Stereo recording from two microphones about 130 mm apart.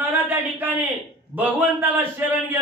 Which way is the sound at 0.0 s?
15° right (ahead or behind).